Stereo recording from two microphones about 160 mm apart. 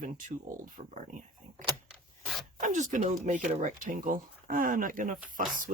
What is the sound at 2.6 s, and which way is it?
Speech, 55° right (ahead or behind).